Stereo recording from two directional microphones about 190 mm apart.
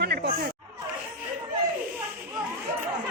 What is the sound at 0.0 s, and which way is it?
Chatter, 55° right (ahead or behind).